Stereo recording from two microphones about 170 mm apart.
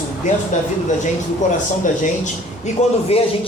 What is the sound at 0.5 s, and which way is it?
Speech, 45° left (ahead or behind).